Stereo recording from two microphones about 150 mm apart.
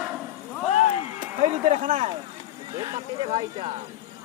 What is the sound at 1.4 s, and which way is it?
Speech, 50° right (ahead or behind).